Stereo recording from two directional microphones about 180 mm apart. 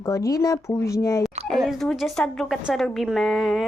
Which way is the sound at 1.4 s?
Centre (ahead or behind).